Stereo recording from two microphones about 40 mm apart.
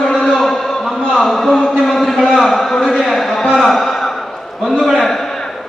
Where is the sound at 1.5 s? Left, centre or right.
Centre.